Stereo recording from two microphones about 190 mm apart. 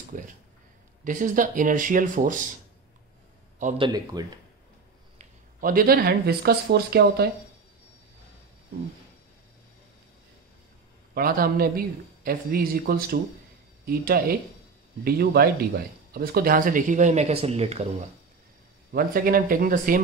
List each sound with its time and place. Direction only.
0.1 s speech: 45° right (ahead or behind)
3.7 s speech: 25° right (ahead or behind)
5.2 s speech: 45° right (ahead or behind)
11.1 s speech: 50° right (ahead or behind); by 17.8 s 35° right (ahead or behind)
18.9 s speech: 50° right (ahead or behind)